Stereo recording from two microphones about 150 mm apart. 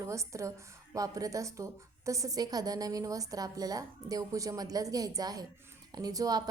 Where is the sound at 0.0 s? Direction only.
20° right (ahead or behind).